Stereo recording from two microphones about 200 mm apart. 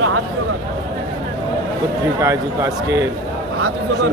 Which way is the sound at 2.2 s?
15° right (ahead or behind).